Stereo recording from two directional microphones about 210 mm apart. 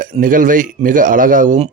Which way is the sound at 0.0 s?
40° right (ahead or behind).